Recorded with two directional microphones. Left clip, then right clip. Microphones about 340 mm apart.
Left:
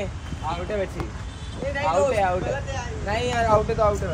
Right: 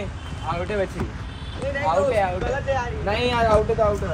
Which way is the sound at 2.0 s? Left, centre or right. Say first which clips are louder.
Left 1 dB; left.